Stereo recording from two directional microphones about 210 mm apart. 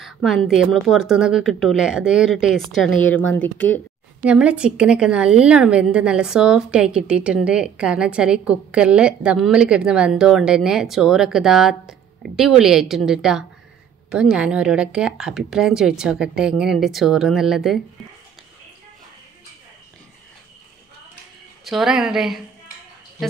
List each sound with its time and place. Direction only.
0.0 s a woman's voice: centre (ahead or behind)
4.2 s a woman's voice: 5° right (ahead or behind)
21.6 s a woman's voice: centre (ahead or behind)